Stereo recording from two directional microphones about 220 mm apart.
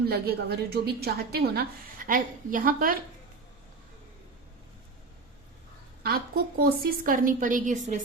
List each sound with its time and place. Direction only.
0.1 s a woman's voice: 45° right (ahead or behind)
6.0 s a woman's voice: 45° right (ahead or behind)